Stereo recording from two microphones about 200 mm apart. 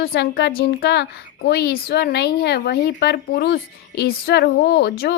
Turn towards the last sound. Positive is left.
turn(degrees=55)  # may be behind; listen again after turning